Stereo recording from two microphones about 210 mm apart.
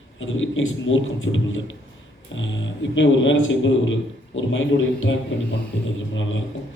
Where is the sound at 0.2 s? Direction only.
65° left (ahead or behind).